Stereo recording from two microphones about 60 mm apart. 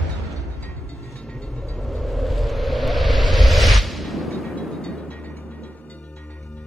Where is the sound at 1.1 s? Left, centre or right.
Centre.